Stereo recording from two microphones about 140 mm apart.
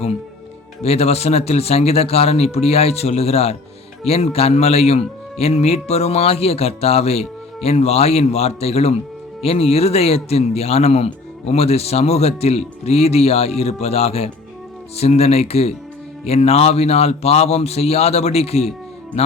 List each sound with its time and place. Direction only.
0.8 s speech: 50° left (ahead or behind)